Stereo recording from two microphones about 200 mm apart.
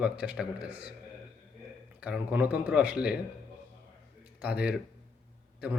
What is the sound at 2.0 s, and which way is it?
A man's voice, 5° right (ahead or behind).